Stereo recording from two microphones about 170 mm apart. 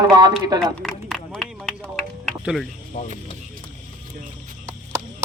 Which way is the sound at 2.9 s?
40° left (ahead or behind).